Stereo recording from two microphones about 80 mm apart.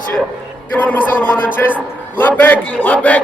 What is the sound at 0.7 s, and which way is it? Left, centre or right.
A man's voice, left.